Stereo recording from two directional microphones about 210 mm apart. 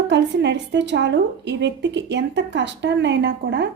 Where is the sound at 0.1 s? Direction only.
55° right (ahead or behind).